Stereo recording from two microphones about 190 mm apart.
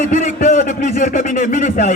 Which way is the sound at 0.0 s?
40° left (ahead or behind).